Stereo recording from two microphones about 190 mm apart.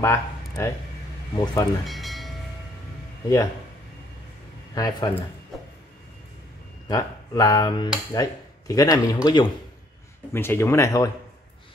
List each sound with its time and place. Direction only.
0.0 s speech: 15° left (ahead or behind)
1.9 s train: centre (ahead or behind)
4.7 s speech: 20° left (ahead or behind)
6.9 s speech: 20° left (ahead or behind)